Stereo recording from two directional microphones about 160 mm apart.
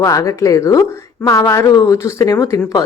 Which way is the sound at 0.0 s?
20° left (ahead or behind).